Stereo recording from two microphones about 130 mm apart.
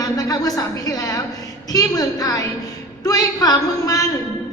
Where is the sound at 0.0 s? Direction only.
30° left (ahead or behind).